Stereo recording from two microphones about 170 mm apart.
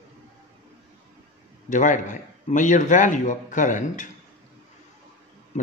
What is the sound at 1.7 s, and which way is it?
A man's voice, 50° left (ahead or behind).